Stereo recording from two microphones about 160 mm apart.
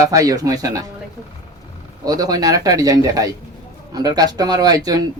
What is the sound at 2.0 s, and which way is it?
Speech, 25° right (ahead or behind).